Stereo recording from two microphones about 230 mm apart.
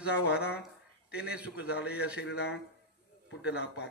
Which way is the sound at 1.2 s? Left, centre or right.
Centre.